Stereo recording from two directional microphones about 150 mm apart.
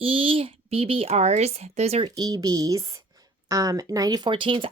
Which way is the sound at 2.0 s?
25° right (ahead or behind).